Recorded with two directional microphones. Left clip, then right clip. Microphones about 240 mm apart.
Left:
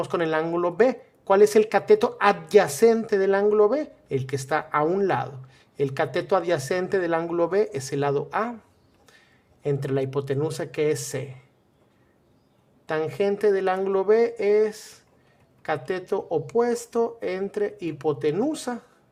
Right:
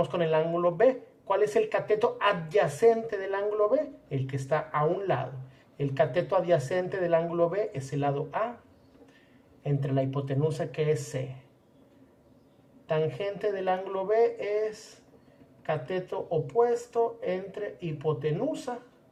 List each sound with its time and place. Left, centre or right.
0.0 s speech: left
9.6 s speech: left
12.9 s speech: left